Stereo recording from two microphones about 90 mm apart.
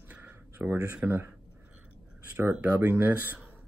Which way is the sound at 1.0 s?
25° right (ahead or behind).